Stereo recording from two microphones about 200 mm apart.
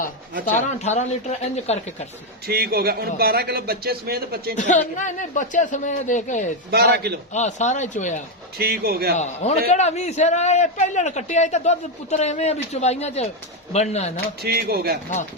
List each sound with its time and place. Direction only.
0.7 s a man's voice: 35° left (ahead or behind)
2.5 s a man's voice: 50° right (ahead or behind)
4.5 s a man's voice: 40° left (ahead or behind)
6.7 s a man's voice: 50° right (ahead or behind)
7.3 s a man's voice: 35° left (ahead or behind)
8.5 s a man's voice: 50° right (ahead or behind)
9.1 s a man's voice: 35° left (ahead or behind)
14.4 s a man's voice: 50° right (ahead or behind)